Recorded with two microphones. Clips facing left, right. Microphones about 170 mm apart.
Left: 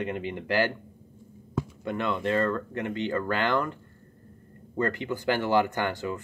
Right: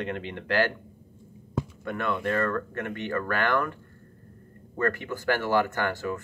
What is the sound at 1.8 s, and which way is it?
Speech, 20° left (ahead or behind).